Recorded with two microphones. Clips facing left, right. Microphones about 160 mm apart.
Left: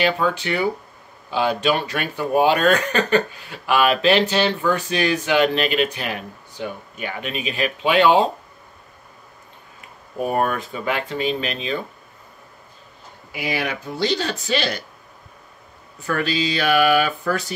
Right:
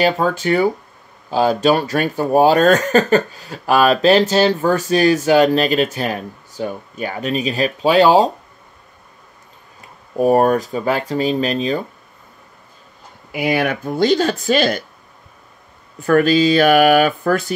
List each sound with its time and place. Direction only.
0.0 s speech: 40° right (ahead or behind)
10.1 s speech: 40° right (ahead or behind)
13.3 s speech: 55° right (ahead or behind)
16.0 s speech: 50° right (ahead or behind)